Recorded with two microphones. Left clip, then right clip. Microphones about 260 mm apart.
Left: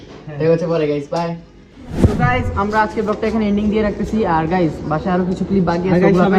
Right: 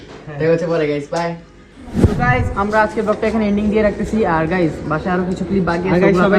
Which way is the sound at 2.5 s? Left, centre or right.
Centre.